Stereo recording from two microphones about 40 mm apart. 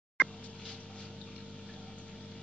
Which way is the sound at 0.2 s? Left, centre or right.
Right.